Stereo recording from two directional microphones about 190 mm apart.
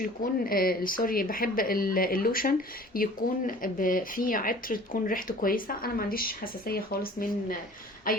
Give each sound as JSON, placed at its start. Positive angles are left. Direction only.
{"t": 0.0, "sound": "speech", "side_deg": 50}